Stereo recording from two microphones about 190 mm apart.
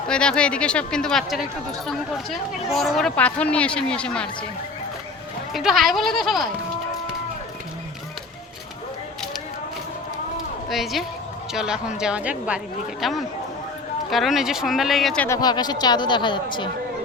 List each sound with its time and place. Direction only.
0.1 s speech: 5° left (ahead or behind)
5.5 s speech: centre (ahead or behind)
10.7 s speech: centre (ahead or behind)
15.3 s speech: 20° left (ahead or behind)